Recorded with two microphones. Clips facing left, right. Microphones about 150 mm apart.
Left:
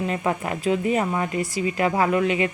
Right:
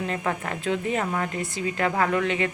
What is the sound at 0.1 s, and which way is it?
A woman's voice, 10° left (ahead or behind).